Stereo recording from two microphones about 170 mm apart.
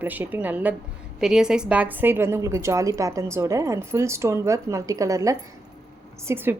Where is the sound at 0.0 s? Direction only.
10° right (ahead or behind).